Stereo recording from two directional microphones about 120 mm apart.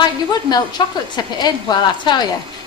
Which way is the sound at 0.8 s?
40° left (ahead or behind).